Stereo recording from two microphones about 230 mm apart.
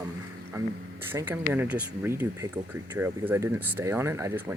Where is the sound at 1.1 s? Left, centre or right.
Centre.